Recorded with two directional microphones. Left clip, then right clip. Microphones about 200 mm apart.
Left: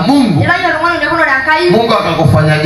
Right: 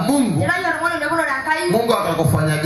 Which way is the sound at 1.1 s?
45° right (ahead or behind).